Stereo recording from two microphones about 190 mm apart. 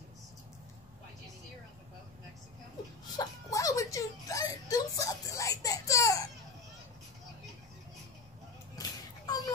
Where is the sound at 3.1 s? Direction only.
20° left (ahead or behind).